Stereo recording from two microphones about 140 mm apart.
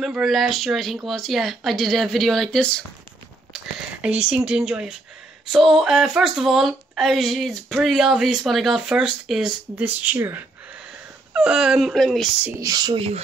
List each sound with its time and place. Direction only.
0.0 s speech: centre (ahead or behind)
3.5 s speech: 5° right (ahead or behind)
12.4 s speech: 25° right (ahead or behind); by 13.2 s 40° right (ahead or behind)